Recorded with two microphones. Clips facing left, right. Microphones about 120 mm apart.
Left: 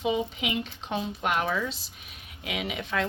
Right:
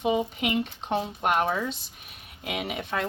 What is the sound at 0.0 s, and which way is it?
Speech, 50° right (ahead or behind).